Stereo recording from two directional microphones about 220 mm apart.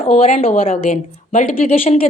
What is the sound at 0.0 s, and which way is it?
Speech, 30° left (ahead or behind).